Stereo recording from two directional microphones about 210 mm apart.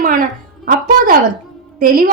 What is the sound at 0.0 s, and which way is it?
Speech, 40° right (ahead or behind).